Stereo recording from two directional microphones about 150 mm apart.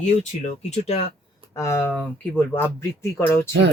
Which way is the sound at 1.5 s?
20° left (ahead or behind).